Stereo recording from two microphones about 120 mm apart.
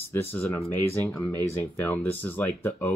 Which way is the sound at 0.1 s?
15° left (ahead or behind).